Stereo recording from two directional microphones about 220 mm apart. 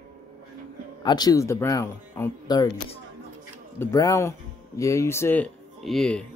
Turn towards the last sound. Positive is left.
turn(degrees=5)  # may be behind; listen again after turning